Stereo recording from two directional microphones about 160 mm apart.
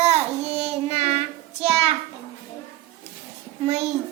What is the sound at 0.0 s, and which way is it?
Child singing, 40° right (ahead or behind).